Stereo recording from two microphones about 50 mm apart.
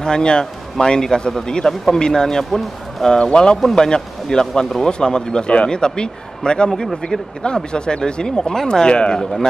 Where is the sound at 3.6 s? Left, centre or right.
Centre.